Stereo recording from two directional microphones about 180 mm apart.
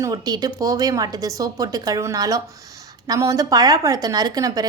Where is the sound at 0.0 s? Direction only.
20° right (ahead or behind).